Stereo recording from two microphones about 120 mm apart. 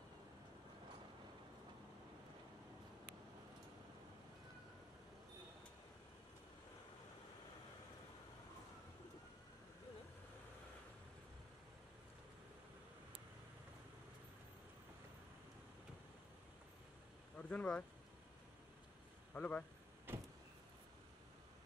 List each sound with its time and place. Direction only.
17.4 s speech: 10° left (ahead or behind)
19.3 s speech: 10° left (ahead or behind)
20.1 s vehicle: 20° right (ahead or behind)